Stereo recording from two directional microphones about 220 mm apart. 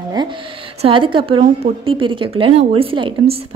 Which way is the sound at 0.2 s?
20° right (ahead or behind).